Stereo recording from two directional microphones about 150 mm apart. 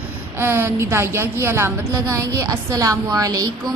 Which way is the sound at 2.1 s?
20° right (ahead or behind).